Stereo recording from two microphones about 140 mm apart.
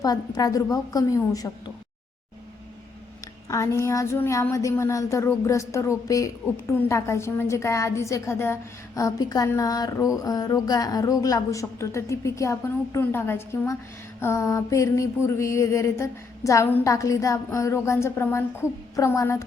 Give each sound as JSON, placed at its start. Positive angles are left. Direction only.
{"t": 0.0, "sound": "speech", "side_deg": 25}
{"t": 3.5, "sound": "speech", "side_deg": 20}